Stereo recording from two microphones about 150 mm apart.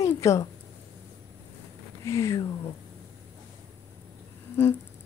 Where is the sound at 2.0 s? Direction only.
20° left (ahead or behind).